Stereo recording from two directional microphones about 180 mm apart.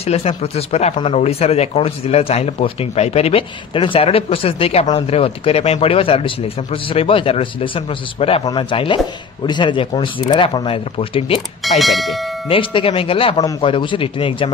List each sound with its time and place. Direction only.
0.0 s speech: 35° left (ahead or behind)
11.8 s speech: centre (ahead or behind)
12.4 s speech: 30° left (ahead or behind)